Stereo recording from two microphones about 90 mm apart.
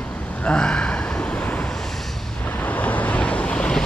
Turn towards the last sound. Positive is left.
turn(degrees=10)  # may be behind; listen again after turning